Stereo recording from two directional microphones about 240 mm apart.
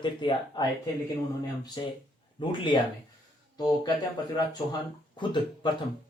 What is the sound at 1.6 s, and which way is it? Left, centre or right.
Speech, centre.